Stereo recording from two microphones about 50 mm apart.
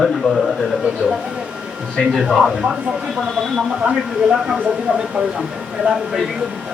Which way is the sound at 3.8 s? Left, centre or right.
Centre.